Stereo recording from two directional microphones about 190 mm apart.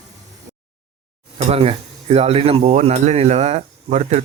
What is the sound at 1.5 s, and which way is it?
Speech, 30° right (ahead or behind).